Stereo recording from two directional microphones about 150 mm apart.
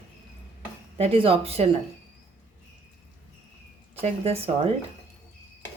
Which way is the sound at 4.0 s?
40° right (ahead or behind).